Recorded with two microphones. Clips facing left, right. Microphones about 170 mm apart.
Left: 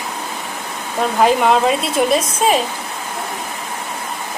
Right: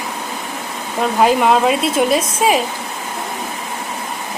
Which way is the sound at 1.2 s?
Centre (ahead or behind).